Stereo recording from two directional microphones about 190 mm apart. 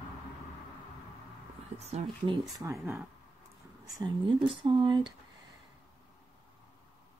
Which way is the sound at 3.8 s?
20° right (ahead or behind).